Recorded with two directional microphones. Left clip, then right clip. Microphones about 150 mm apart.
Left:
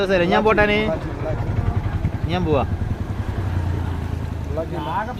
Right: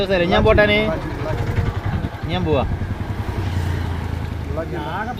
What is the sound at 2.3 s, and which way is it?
Speech, 25° left (ahead or behind).